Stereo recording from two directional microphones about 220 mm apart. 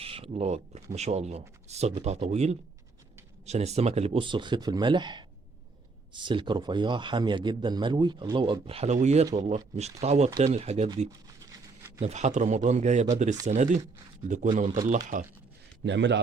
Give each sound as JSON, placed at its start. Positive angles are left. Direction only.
{"t": 0.0, "sound": "speech", "side_deg": -25}
{"t": 12.0, "sound": "speech", "side_deg": -30}
{"t": 15.8, "sound": "a man's voice", "side_deg": -55}